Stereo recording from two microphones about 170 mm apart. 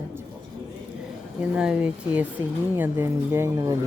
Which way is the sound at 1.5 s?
5° right (ahead or behind).